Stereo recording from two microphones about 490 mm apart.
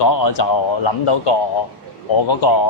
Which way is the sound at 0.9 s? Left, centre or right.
Left.